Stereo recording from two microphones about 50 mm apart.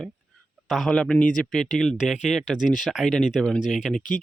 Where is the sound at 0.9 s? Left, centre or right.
Centre.